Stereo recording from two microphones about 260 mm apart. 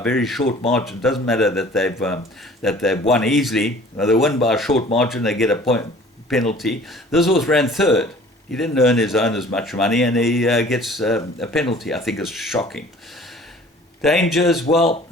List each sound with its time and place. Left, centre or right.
0.0 s speech: centre
14.0 s speech: centre